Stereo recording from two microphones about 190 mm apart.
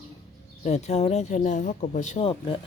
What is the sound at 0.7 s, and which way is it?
Speech, 35° left (ahead or behind).